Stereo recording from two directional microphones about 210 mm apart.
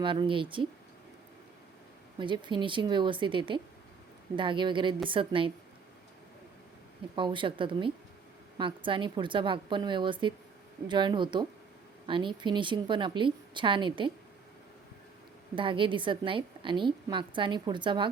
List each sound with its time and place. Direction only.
0.0 s a woman's voice: 25° right (ahead or behind)
2.1 s a woman's voice: 20° right (ahead or behind)
7.2 s a woman's voice: 25° right (ahead or behind)
15.5 s a woman's voice: 25° right (ahead or behind)